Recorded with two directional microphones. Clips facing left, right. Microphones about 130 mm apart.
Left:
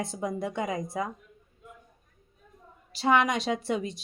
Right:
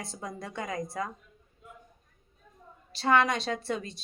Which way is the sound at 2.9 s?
15° left (ahead or behind).